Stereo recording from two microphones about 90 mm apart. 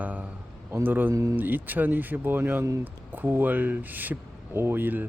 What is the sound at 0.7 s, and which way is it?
Speech, 20° right (ahead or behind).